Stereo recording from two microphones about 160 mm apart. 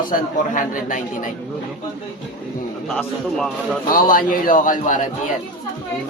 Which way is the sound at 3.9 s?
60° left (ahead or behind).